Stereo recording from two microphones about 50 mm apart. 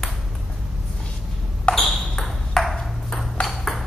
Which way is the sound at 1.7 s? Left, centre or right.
Centre.